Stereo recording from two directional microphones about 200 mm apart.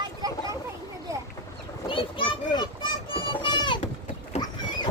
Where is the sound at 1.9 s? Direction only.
25° left (ahead or behind).